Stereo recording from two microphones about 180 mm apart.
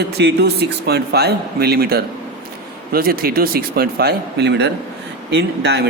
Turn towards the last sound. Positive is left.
turn(degrees=-65)  # may be behind; listen again after turning